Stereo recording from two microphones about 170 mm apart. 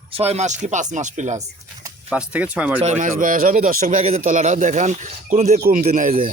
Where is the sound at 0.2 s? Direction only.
40° right (ahead or behind).